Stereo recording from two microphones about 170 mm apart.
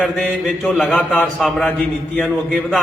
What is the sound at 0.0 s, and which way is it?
A man's voice, 5° left (ahead or behind).